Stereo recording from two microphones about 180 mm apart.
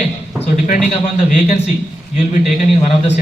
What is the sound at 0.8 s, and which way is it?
A man's voice, 45° left (ahead or behind).